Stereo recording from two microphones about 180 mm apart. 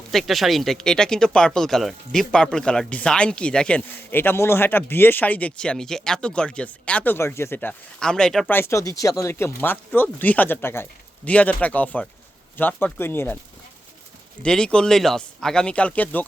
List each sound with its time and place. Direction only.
0.1 s speech: centre (ahead or behind)
8.5 s speech: 15° left (ahead or behind)
14.4 s speech: 5° left (ahead or behind)